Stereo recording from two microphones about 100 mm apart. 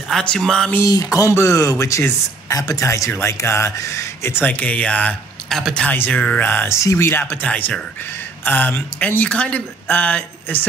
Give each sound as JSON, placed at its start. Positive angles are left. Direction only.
{"t": 0.1, "sound": "speech", "side_deg": 5}
{"t": 0.8, "sound": "speech", "side_deg": 35}
{"t": 5.9, "sound": "speech", "side_deg": 15}
{"t": 7.4, "sound": "speech", "side_deg": 15}